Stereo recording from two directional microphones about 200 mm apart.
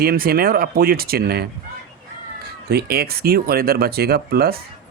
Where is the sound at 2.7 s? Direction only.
50° right (ahead or behind).